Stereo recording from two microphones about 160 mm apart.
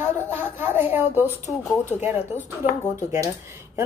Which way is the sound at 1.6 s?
10° left (ahead or behind).